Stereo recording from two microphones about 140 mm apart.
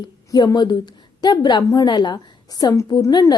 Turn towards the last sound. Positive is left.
turn(degrees=30)  # may be behind; listen again after turning